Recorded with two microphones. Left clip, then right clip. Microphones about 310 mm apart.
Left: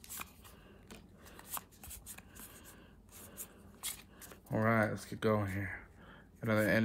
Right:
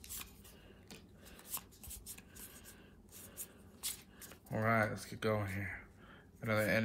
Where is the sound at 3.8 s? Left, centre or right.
Centre.